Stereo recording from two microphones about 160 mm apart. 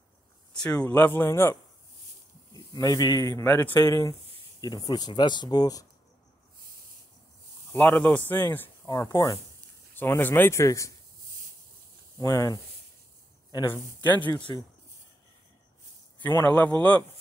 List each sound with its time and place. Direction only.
0.5 s a sound: 5° left (ahead or behind)
0.8 s speech: 10° left (ahead or behind)
7.7 s speech: 10° left (ahead or behind)
12.2 s speech: 20° left (ahead or behind)
14.0 s speech: 10° left (ahead or behind)
16.2 s speech: 10° left (ahead or behind)